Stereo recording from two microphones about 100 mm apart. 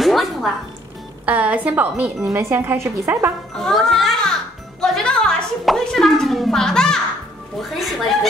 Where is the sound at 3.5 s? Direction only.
5° left (ahead or behind).